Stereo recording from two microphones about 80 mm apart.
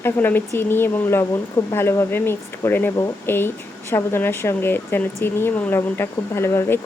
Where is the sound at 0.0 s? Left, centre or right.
Left.